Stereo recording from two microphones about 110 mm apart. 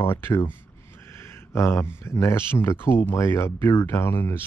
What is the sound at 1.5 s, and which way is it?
Speech, 25° left (ahead or behind).